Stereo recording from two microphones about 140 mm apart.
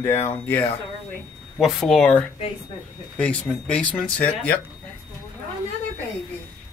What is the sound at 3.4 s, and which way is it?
Speech, 5° left (ahead or behind).